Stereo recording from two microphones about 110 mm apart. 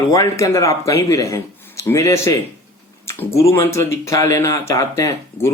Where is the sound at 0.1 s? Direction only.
30° left (ahead or behind).